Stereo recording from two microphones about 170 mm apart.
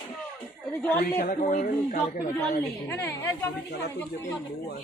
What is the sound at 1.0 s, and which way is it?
Speech, 55° left (ahead or behind).